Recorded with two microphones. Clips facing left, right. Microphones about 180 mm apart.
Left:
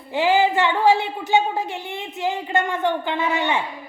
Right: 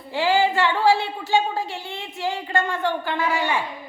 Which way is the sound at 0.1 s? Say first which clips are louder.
Left 2 dB; 20° left (ahead or behind).